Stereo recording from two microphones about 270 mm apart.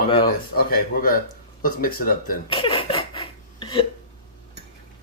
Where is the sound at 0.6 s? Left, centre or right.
Left.